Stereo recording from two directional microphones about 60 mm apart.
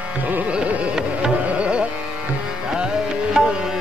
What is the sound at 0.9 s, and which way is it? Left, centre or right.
Carnatic music, centre.